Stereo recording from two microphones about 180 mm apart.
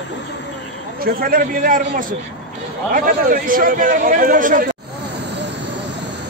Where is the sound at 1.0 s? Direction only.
55° right (ahead or behind).